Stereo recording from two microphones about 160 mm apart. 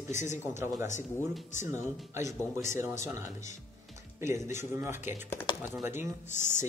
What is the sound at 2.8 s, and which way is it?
Speech, 20° right (ahead or behind).